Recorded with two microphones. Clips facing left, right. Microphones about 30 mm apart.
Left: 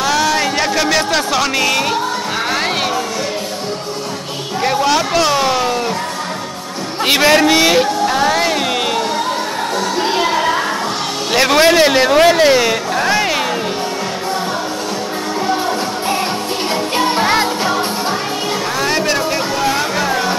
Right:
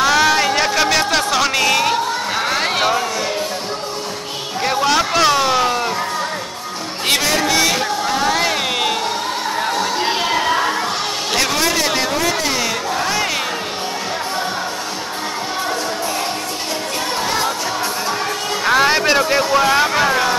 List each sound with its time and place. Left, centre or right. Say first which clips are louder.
0.0 s a sound: right 1 dB; centre
4.6 s a man's voice: left 2 dB; centre
7.2 s a man's voice: left 8 dB; left
7.8 s a man's voice: left 4 dB; centre
10.0 s music: left 3 dB; centre
11.5 s a man's voice: left 7 dB; left; by 13.4 s centre
17.0 s music: left 6 dB; left
18.7 s music: right 5 dB; centre